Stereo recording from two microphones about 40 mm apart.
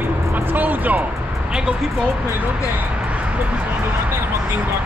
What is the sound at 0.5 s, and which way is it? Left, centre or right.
Speech, right.